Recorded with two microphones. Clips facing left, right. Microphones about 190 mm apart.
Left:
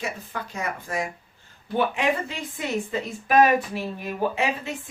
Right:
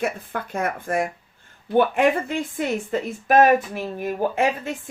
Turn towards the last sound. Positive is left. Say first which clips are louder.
# right 3 dB
turn(degrees=-50)  # may be behind; listen again after turning